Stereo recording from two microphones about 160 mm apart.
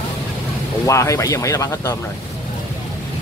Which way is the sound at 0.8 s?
20° left (ahead or behind).